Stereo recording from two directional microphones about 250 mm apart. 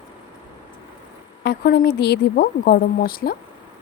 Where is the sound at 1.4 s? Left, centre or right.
Left.